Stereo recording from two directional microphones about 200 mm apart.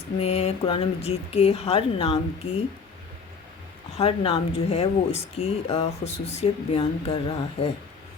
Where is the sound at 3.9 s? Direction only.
30° left (ahead or behind).